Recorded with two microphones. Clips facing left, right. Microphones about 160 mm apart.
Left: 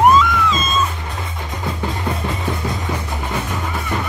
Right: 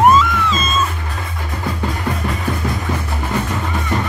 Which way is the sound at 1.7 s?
20° left (ahead or behind).